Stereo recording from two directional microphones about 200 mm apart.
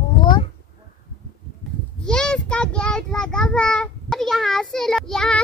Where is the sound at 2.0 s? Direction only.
5° left (ahead or behind).